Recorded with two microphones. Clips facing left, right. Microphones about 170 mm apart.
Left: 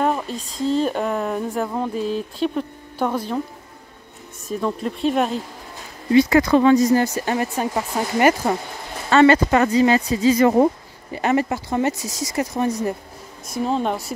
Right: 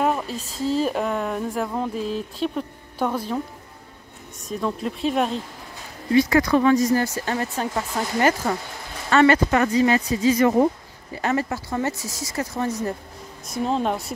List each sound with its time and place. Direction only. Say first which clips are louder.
0.0 s speech: left 1 dB; 5° right (ahead or behind)
4.5 s speech: left 2 dB; centre (ahead or behind)
6.1 s speech: left 3 dB; 25° left (ahead or behind)
9.1 s speech: left 3 dB; 30° left (ahead or behind)
11.1 s speech: left 4 dB; 15° left (ahead or behind)
13.5 s speech: left 1 dB; centre (ahead or behind)